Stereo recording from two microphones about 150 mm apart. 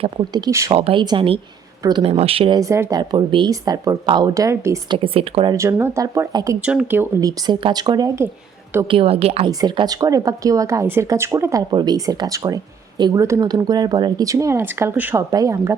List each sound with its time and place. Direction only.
0.0 s speech: 30° right (ahead or behind)
2.0 s speech: 40° right (ahead or behind)
2.6 s speech: 20° right (ahead or behind)
3.0 s speech: 30° right (ahead or behind)
4.9 s speech: 40° right (ahead or behind)
5.5 s speech: 20° right (ahead or behind)
6.6 s speech: 10° right (ahead or behind)
8.9 s speech: 40° right (ahead or behind)
9.5 s speech: 25° right (ahead or behind)
11.7 s speech: 30° right (ahead or behind)